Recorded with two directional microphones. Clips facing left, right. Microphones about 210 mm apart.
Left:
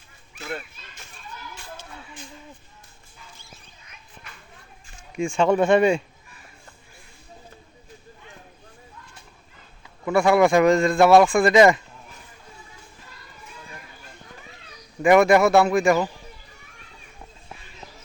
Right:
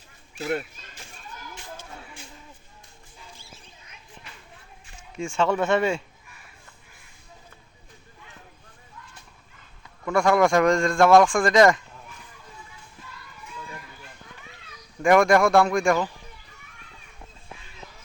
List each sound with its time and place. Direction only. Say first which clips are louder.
0.3 s children playing: right 6 dB; 35° right (ahead or behind)
5.1 s speech: left 4 dB; 15° left (ahead or behind)
10.1 s speech: left 2 dB; 5° left (ahead or behind)
15.0 s a man's voice: left 2 dB; 5° left (ahead or behind)